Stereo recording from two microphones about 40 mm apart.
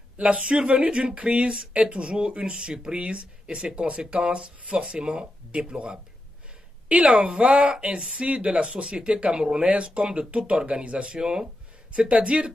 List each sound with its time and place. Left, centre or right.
0.4 s speech: right
6.9 s a woman's voice: right
9.6 s speech: right
11.1 s speech: centre